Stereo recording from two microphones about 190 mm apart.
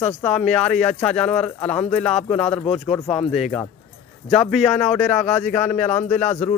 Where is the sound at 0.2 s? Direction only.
5° left (ahead or behind).